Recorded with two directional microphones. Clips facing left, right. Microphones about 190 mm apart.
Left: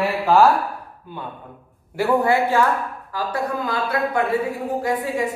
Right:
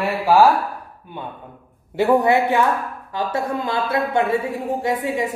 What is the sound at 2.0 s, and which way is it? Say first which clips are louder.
A woman's voice: right 2 dB; 20° right (ahead or behind).